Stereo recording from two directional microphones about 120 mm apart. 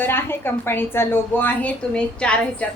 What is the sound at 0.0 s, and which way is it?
A woman's voice, 20° left (ahead or behind).